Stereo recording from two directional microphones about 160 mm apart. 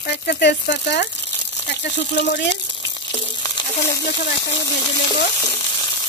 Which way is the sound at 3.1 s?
30° left (ahead or behind).